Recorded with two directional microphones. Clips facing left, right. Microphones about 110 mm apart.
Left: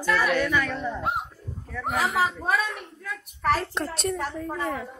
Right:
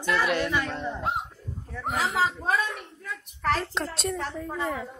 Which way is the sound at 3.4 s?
5° left (ahead or behind).